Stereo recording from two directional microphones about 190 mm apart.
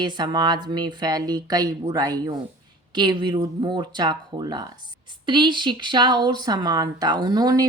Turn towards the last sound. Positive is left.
turn(degrees=-20)  # may be behind; listen again after turning